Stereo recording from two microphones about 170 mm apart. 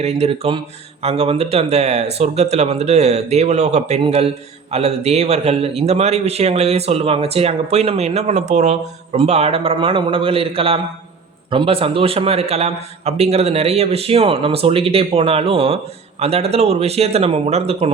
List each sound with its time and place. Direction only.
0.0 s a man's voice: 35° right (ahead or behind)